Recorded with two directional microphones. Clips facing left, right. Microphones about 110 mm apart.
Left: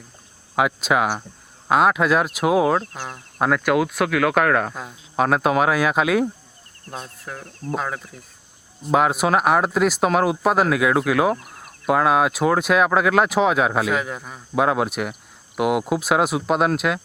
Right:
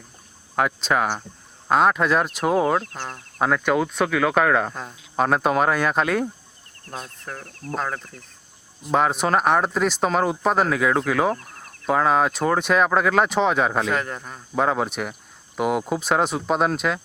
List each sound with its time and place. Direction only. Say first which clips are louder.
0.5 s speech: left 2 dB; 5° left (ahead or behind)
7.4 s speech: left 6 dB; 20° left (ahead or behind)
7.8 s speech: right 3 dB; 5° left (ahead or behind)